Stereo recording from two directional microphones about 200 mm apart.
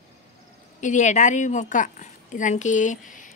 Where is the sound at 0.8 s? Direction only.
35° left (ahead or behind).